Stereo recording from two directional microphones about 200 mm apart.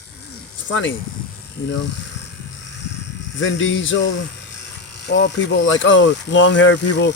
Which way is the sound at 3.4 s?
70° left (ahead or behind).